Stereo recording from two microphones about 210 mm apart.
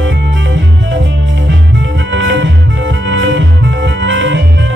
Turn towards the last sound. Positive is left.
turn(degrees=-60)  # may be behind; listen again after turning